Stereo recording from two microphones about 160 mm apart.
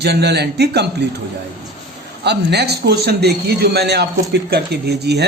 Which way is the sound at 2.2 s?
90° right.